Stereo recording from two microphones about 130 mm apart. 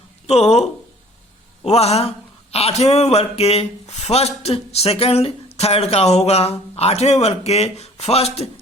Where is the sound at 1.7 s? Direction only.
55° left (ahead or behind).